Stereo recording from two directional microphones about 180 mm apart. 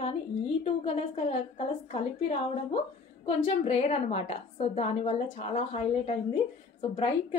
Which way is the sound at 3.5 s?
35° left (ahead or behind).